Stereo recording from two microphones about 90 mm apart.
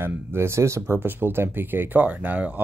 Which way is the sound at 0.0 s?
30° right (ahead or behind).